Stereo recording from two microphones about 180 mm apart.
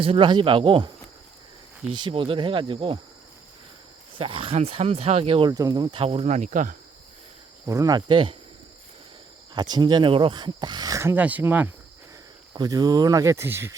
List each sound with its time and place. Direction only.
0.0 s speech: 30° right (ahead or behind)
1.9 s speech: 25° right (ahead or behind)
4.2 s speech: 30° right (ahead or behind)
5.5 s speech: 20° right (ahead or behind); by 6.7 s 45° right (ahead or behind)
7.7 s speech: 20° right (ahead or behind)
9.6 s speech: 25° right (ahead or behind)
12.5 s speech: 20° right (ahead or behind)